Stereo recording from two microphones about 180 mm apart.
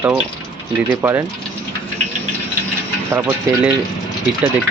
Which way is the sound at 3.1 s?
10° right (ahead or behind).